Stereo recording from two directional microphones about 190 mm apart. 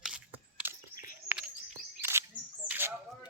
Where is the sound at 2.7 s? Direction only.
10° right (ahead or behind).